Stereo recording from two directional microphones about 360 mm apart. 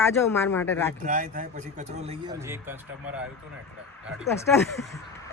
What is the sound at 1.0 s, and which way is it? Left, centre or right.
A man's voice, right.